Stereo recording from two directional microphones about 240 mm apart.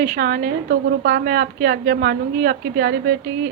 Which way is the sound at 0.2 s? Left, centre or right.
Right.